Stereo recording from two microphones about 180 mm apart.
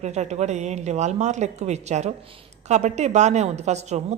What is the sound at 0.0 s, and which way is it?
A woman's voice, 40° right (ahead or behind).